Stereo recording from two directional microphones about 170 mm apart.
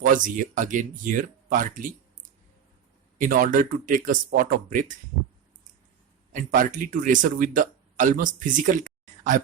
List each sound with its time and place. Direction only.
0.0 s speech: 50° right (ahead or behind)
3.2 s speech: 50° right (ahead or behind)
6.3 s speech: 50° right (ahead or behind)